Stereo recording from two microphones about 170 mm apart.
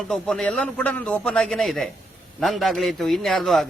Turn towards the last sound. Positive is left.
turn(degrees=0)  # may be behind; listen again after turning